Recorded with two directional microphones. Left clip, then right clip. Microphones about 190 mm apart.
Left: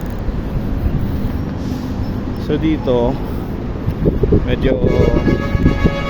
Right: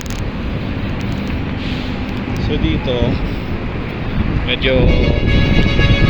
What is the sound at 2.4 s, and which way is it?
Speech, 55° left (ahead or behind).